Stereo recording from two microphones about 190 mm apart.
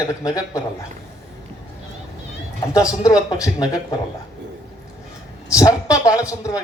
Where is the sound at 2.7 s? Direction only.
20° left (ahead or behind).